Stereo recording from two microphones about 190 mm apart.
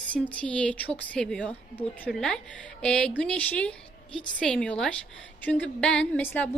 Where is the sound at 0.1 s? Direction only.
5° left (ahead or behind).